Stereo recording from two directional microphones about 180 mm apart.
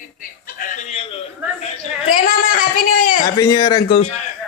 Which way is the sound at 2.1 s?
50° left (ahead or behind).